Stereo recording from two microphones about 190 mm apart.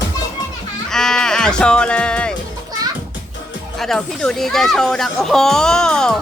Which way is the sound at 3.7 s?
Centre (ahead or behind).